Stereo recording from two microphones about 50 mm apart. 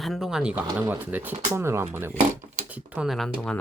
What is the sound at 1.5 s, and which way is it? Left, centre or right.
Speech, right.